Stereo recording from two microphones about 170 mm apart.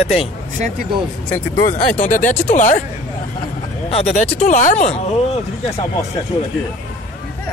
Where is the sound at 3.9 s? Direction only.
40° left (ahead or behind).